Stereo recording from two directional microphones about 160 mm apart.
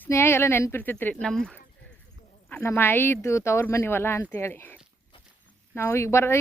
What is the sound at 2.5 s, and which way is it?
Speech, 15° left (ahead or behind).